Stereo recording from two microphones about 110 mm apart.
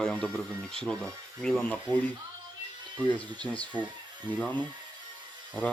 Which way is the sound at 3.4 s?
10° left (ahead or behind).